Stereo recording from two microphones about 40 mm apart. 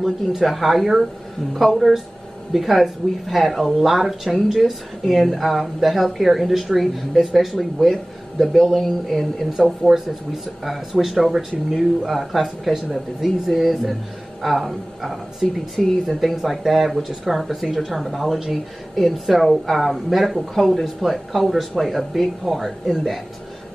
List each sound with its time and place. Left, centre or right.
0.0 s speech: centre
15.4 s speech: centre